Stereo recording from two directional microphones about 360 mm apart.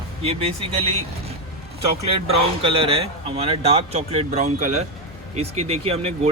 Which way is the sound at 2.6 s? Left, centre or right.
Centre.